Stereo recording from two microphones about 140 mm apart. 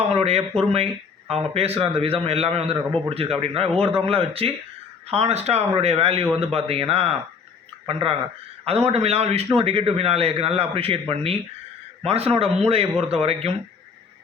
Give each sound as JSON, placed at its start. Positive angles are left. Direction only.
{"t": 0.0, "sound": "a man's voice", "side_deg": -45}